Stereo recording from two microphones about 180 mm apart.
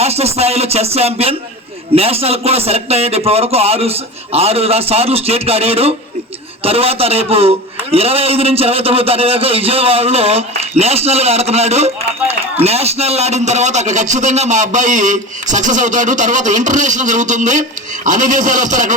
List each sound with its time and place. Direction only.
0.0 s a man's voice: 35° right (ahead or behind)